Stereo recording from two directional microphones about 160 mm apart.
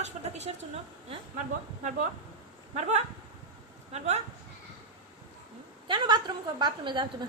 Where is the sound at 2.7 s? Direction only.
45° right (ahead or behind).